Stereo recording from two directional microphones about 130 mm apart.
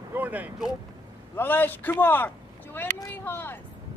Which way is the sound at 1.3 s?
15° left (ahead or behind).